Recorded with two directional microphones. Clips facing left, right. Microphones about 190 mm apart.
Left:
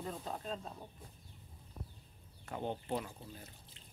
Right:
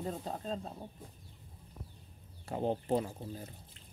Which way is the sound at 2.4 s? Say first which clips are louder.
Right 6 dB; 35° right (ahead or behind).